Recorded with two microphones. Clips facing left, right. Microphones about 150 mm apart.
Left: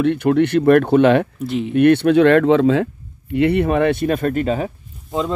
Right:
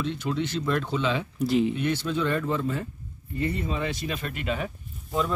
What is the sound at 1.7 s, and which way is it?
Speech, 65° left (ahead or behind).